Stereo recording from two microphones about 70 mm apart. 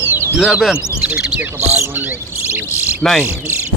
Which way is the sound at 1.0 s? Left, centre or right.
Centre.